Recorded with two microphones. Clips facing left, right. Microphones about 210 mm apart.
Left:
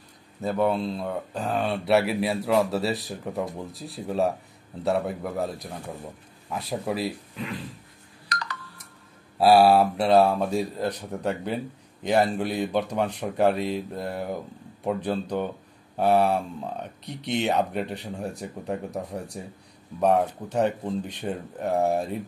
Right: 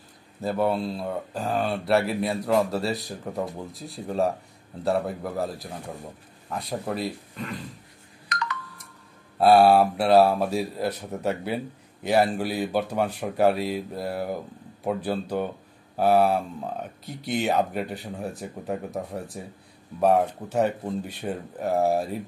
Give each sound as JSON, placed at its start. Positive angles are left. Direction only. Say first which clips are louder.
{"t": 0.4, "sound": "speech", "louder": "even", "side_deg": 0}
{"t": 8.3, "sound": "a sound", "louder": "right 3 dB", "side_deg": 35}
{"t": 9.4, "sound": "speech", "louder": "even", "side_deg": 0}